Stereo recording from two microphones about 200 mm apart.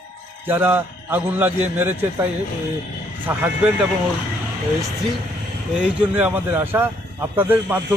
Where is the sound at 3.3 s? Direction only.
10° right (ahead or behind).